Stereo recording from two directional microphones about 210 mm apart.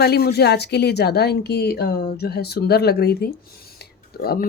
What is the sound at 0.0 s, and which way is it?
Speech, 50° left (ahead or behind).